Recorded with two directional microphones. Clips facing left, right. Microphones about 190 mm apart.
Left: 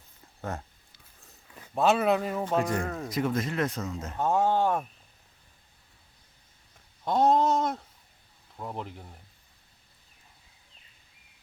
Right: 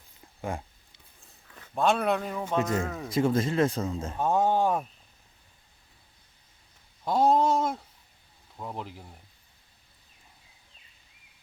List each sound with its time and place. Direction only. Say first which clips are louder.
0.5 s speech: right 2 dB; 10° right (ahead or behind)
1.7 s speech: left 2 dB; 5° left (ahead or behind)
3.1 s speech: right 5 dB; 30° right (ahead or behind)
4.2 s speech: even; 15° right (ahead or behind)
7.0 s speech: even; centre (ahead or behind)